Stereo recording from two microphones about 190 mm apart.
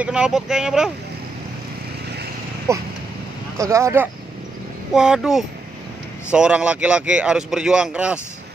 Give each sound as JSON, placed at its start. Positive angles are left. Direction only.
{"t": 0.0, "sound": "speech", "side_deg": -5}
{"t": 2.7, "sound": "speech", "side_deg": -15}
{"t": 4.9, "sound": "speech", "side_deg": -5}